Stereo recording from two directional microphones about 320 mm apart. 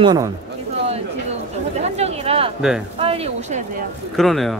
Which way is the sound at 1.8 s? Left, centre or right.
Centre.